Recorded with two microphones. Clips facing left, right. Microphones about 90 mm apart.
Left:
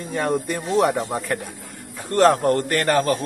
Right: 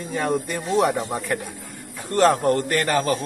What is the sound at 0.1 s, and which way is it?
Speech, centre (ahead or behind).